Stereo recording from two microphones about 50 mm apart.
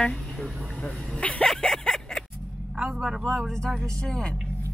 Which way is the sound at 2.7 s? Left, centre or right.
Centre.